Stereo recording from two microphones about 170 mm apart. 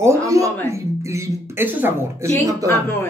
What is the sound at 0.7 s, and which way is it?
Speech, 15° right (ahead or behind).